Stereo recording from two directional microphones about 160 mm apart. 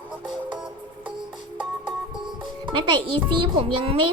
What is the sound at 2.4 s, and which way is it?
A child's voice, 30° right (ahead or behind).